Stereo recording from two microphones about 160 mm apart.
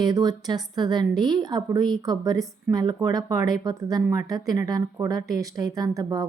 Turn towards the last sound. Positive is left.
turn(degrees=-25)  # may be behind; listen again after turning